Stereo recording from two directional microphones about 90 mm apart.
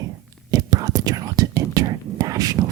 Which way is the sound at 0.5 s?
45° right (ahead or behind).